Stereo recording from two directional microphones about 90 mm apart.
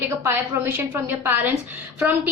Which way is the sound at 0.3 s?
30° right (ahead or behind).